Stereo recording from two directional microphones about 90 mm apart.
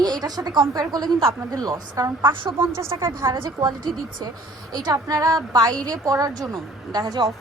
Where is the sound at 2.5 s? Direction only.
30° right (ahead or behind).